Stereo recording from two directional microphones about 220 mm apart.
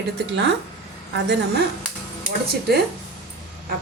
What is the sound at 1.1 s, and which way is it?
Speech, 50° right (ahead or behind).